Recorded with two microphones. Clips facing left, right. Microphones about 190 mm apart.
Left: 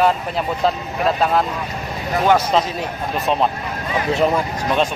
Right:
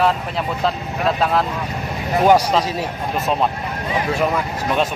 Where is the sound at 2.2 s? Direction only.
15° right (ahead or behind).